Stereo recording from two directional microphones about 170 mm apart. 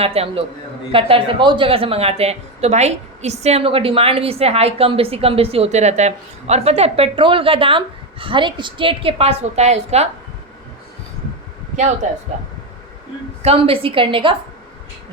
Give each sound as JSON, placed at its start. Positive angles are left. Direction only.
{"t": 0.0, "sound": "speech", "side_deg": -35}
{"t": 12.0, "sound": "speech", "side_deg": -45}
{"t": 13.4, "sound": "speech", "side_deg": -35}